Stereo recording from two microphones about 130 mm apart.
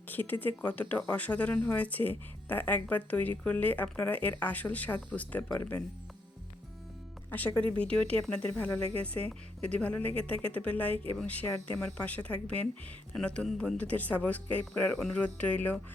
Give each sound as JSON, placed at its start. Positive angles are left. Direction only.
{"t": 0.1, "sound": "speech", "side_deg": 15}
{"t": 7.3, "sound": "speech", "side_deg": 15}